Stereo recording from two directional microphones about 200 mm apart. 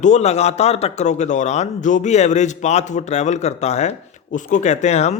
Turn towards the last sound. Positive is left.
turn(degrees=35)  # may be behind; listen again after turning